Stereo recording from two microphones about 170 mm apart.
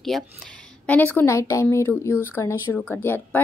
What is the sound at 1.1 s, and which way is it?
Speech, 15° left (ahead or behind).